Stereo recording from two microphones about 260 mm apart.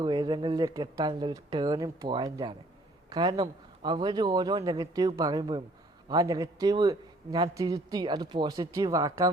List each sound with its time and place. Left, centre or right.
0.0 s a man's voice: centre